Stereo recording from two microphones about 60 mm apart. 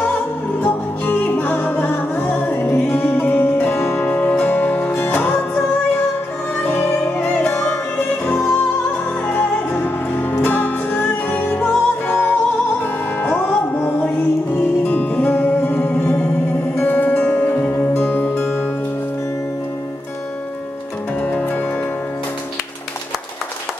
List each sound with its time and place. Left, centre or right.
0.6 s music: left
2.6 s music: left
2.9 s music: left
4.0 s music: left
8.3 s music: centre
9.8 s music: left